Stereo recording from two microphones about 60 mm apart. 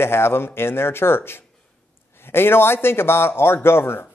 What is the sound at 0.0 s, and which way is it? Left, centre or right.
A man's voice, left.